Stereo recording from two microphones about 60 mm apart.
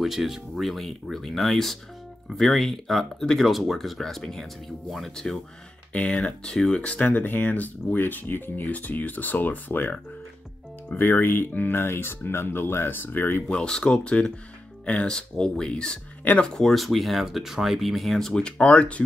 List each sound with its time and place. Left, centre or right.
0.0 s speech: centre
5.9 s speech: centre
11.0 s speech: left
13.5 s speech: centre
18.6 s speech: left